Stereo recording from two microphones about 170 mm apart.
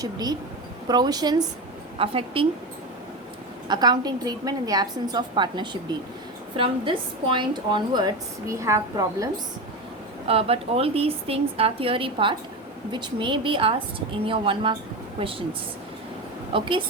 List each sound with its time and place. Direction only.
0.0 s a woman's voice: 25° right (ahead or behind)
3.7 s a woman's voice: 25° right (ahead or behind)
10.2 s a woman's voice: 35° right (ahead or behind)
16.5 s a woman's voice: 30° right (ahead or behind)